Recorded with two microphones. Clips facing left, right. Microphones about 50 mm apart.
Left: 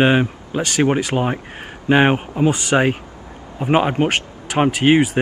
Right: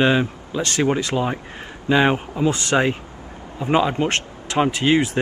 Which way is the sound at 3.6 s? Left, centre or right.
Left.